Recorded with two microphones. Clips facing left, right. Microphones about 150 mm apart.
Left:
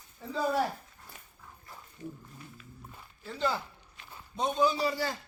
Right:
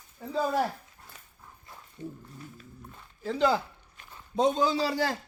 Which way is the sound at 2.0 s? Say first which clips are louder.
Right 3 dB; 25° right (ahead or behind).